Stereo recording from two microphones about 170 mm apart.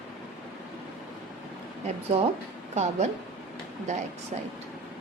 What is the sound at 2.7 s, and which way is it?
A woman's voice, 40° right (ahead or behind).